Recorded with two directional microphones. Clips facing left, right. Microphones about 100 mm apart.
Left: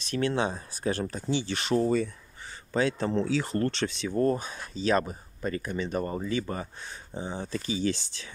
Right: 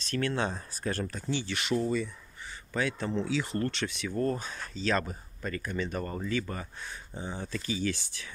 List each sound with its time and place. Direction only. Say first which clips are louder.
0.0 s speech: left 3 dB; 20° left (ahead or behind); by 2.0 s 40° left (ahead or behind)
2.7 s speech: left 5 dB; 30° left (ahead or behind)